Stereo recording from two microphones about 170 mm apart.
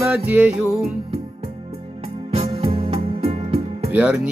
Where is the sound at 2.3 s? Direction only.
30° right (ahead or behind).